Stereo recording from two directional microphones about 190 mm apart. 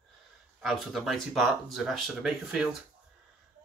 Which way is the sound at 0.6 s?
Centre (ahead or behind).